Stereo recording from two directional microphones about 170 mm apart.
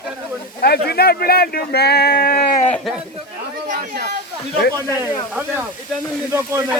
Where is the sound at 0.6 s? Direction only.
70° left (ahead or behind).